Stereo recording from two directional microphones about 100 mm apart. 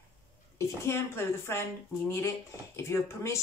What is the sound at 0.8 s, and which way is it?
Speech, 25° left (ahead or behind).